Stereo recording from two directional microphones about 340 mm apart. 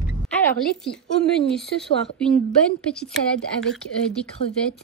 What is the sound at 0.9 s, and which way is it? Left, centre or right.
A woman's voice, centre.